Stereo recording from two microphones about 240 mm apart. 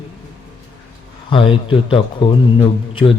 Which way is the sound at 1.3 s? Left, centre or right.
Left.